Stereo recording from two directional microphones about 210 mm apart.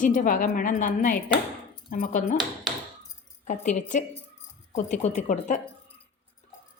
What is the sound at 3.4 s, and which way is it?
A woman's voice, 35° left (ahead or behind).